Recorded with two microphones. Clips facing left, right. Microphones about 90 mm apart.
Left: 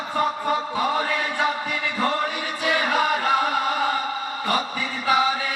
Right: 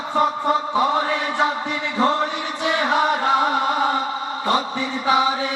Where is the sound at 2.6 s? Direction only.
25° right (ahead or behind).